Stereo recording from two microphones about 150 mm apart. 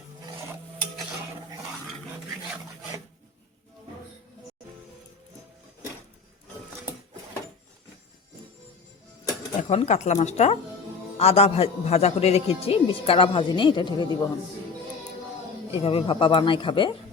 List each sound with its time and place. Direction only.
9.6 s a man's voice: 50° left (ahead or behind); by 14.3 s 30° left (ahead or behind)
15.7 s a man's voice: 40° left (ahead or behind)